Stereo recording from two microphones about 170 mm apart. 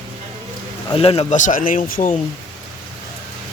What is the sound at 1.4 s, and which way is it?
Speech, 50° left (ahead or behind).